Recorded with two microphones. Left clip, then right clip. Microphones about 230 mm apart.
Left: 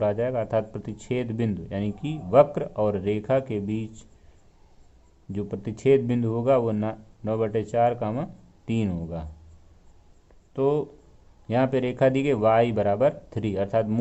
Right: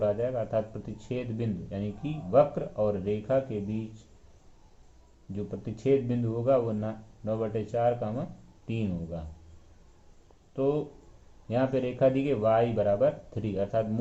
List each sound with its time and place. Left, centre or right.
0.0 s speech: left
5.3 s speech: left
10.5 s speech: left